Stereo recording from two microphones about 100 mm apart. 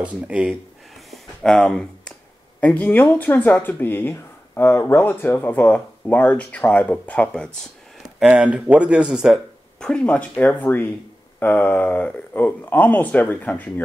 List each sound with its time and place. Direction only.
0.0 s speech: 10° right (ahead or behind)
1.1 s a sound: 5° left (ahead or behind)
2.6 s speech: 15° left (ahead or behind)
8.3 s speech: 10° right (ahead or behind)
9.8 s speech: 10° left (ahead or behind)